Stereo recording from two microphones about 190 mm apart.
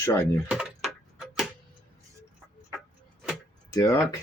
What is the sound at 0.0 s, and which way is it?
Speech, 15° left (ahead or behind).